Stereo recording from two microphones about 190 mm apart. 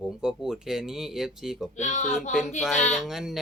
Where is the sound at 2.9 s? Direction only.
Centre (ahead or behind).